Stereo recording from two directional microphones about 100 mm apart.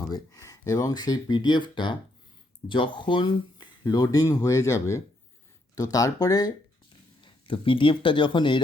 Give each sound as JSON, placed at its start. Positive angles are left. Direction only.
{"t": 0.1, "sound": "speech", "side_deg": 40}
{"t": 7.2, "sound": "speech", "side_deg": 55}